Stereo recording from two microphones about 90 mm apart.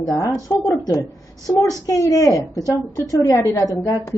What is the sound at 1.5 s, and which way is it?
Speech, 15° left (ahead or behind).